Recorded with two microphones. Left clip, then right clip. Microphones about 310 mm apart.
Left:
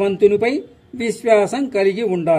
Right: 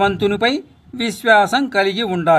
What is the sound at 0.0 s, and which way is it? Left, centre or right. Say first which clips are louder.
Speech: left 1 dB; right.